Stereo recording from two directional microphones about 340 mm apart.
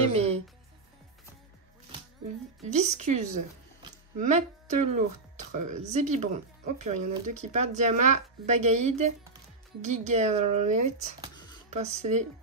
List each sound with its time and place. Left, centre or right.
0.1 s speech: centre
2.6 s a woman's voice: centre